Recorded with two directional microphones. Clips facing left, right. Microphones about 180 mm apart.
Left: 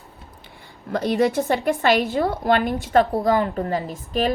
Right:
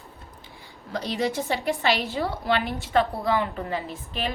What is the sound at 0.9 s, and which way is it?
A woman's voice, 55° left (ahead or behind).